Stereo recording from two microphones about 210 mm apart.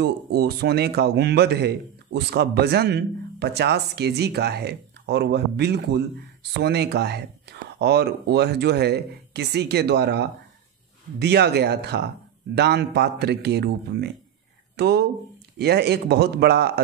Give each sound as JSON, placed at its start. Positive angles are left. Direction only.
{"t": 0.0, "sound": "speech", "side_deg": -50}